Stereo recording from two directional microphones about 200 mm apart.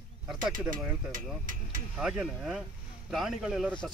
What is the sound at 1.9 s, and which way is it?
Speech, 5° right (ahead or behind).